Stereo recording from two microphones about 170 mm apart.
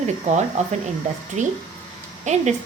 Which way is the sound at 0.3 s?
45° right (ahead or behind).